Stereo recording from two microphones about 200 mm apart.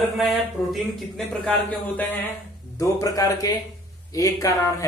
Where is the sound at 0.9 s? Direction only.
5° left (ahead or behind).